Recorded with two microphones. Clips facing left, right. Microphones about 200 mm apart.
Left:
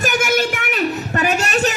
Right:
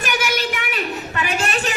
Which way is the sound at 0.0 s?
45° left (ahead or behind).